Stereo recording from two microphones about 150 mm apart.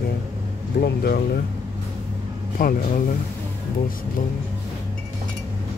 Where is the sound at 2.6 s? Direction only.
70° left (ahead or behind).